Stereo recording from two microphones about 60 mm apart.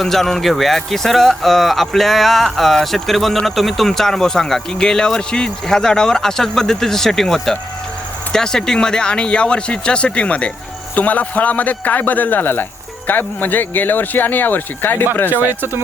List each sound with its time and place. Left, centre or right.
0.0 s a man's voice: centre; by 14.9 s left
15.3 s speech: right